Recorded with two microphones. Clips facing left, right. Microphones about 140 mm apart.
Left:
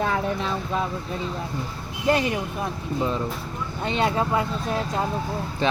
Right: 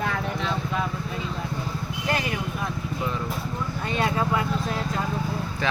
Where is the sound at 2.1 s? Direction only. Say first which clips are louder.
Left 6 dB; 25° left (ahead or behind).